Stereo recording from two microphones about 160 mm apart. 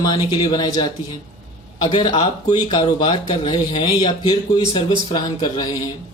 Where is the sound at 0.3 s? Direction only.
25° left (ahead or behind).